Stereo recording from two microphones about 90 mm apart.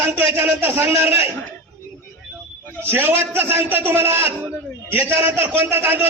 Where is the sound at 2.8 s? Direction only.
25° right (ahead or behind).